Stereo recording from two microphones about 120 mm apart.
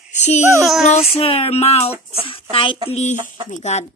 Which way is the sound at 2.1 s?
50° left (ahead or behind).